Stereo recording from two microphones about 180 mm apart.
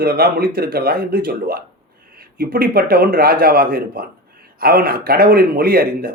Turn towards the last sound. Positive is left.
turn(degrees=-55)  # may be behind; listen again after turning